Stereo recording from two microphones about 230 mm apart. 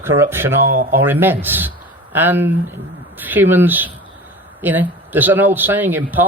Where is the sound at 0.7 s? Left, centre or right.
Right.